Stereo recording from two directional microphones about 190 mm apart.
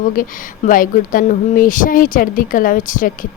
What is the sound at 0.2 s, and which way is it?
Speech, 45° left (ahead or behind).